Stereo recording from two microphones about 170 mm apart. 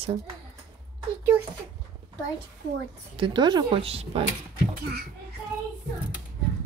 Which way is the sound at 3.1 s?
30° right (ahead or behind).